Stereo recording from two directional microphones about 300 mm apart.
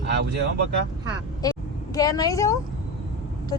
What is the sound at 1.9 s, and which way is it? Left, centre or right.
Speech, centre.